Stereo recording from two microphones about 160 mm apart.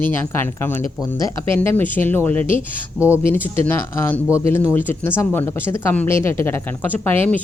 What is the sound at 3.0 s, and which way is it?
Speech, 10° right (ahead or behind).